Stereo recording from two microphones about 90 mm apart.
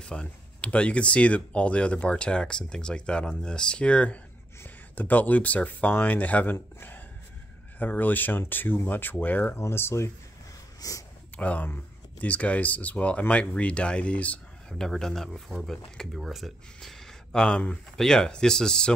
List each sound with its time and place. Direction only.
0.0 s speech: 10° left (ahead or behind); by 11.1 s 40° left (ahead or behind)
11.3 s speech: 15° left (ahead or behind)